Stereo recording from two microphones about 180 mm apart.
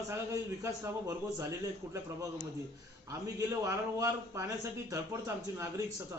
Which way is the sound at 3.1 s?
15° right (ahead or behind).